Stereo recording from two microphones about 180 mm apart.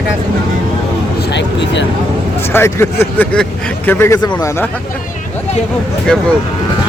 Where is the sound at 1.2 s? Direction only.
70° left (ahead or behind).